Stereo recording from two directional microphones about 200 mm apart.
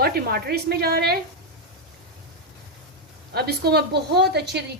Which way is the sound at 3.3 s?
50° right (ahead or behind).